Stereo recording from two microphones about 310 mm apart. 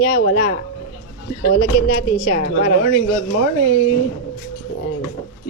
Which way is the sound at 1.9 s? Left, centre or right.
Left.